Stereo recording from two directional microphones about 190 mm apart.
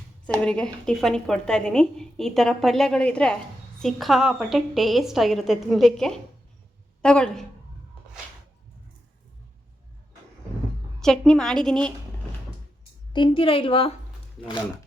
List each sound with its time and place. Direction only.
0.4 s a woman's voice: 5° left (ahead or behind)
11.0 s a woman's voice: 5° left (ahead or behind)
13.1 s a woman's voice: 25° left (ahead or behind)